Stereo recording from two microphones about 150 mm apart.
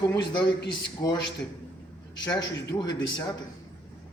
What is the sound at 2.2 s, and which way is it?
Speech, 25° left (ahead or behind).